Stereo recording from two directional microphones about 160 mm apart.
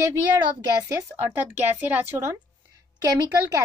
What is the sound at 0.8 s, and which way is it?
A woman's voice, 15° right (ahead or behind).